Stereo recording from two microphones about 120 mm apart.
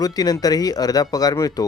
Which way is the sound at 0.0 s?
30° left (ahead or behind).